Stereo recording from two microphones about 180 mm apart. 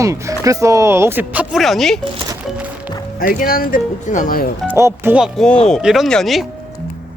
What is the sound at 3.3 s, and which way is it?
Speech, 50° left (ahead or behind).